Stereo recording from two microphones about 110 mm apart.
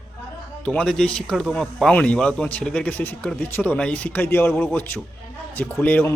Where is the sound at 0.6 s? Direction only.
10° left (ahead or behind).